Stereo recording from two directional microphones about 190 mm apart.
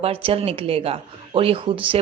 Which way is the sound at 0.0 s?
30° right (ahead or behind).